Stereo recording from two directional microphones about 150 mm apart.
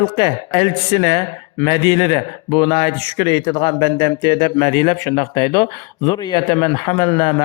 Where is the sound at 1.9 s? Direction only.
25° left (ahead or behind).